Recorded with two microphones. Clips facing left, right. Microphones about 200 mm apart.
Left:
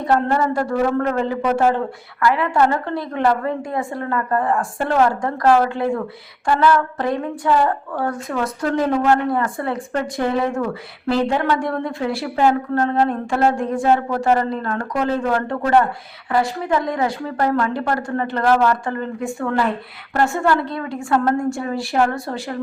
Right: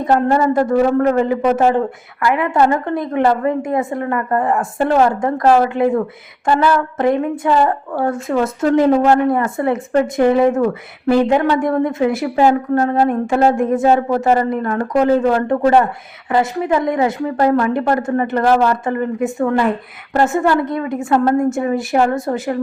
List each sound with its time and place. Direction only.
0.0 s a woman's voice: 20° right (ahead or behind)